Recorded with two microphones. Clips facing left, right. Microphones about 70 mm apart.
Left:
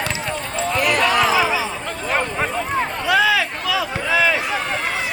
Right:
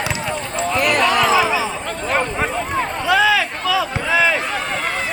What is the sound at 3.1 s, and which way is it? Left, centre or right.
Run, right.